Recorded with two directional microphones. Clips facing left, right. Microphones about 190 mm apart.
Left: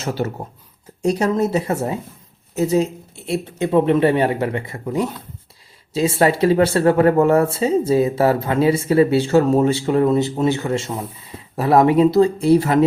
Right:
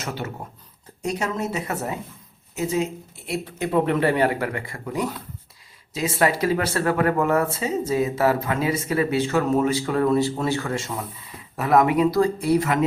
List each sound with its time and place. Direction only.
0.0 s speech: 35° left (ahead or behind)
3.2 s speech: 25° left (ahead or behind)